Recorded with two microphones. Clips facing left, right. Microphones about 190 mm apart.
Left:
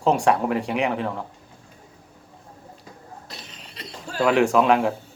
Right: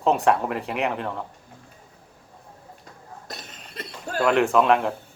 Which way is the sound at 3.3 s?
50° right (ahead or behind).